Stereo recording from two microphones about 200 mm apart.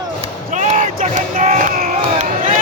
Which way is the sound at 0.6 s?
35° right (ahead or behind).